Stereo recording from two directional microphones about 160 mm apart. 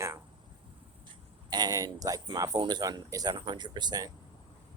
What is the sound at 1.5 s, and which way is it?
Speech, 25° right (ahead or behind).